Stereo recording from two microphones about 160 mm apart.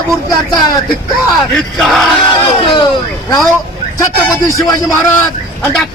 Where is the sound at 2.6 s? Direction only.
30° left (ahead or behind).